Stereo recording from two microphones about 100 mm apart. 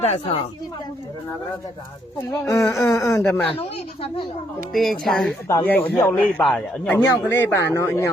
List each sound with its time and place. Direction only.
0.0 s a woman's voice: 90° left
2.3 s speech: 30° left (ahead or behind)
3.4 s speech: 70° left (ahead or behind)
4.7 s speech: centre (ahead or behind)
5.6 s speech: 15° left (ahead or behind)
6.4 s speech: 5° left (ahead or behind)
6.9 s speech: 20° left (ahead or behind)